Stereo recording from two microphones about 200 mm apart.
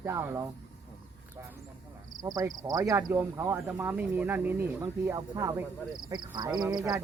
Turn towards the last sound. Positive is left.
turn(degrees=-20)  # may be behind; listen again after turning